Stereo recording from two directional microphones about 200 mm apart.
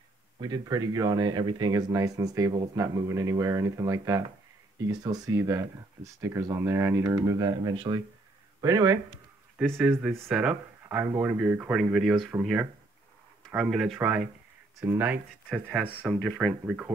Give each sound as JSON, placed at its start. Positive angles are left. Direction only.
{"t": 0.4, "sound": "speech", "side_deg": -20}
{"t": 13.5, "sound": "speech", "side_deg": 0}
{"t": 16.1, "sound": "speech", "side_deg": 0}